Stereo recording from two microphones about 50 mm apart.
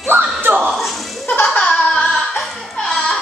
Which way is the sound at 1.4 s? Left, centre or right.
Left.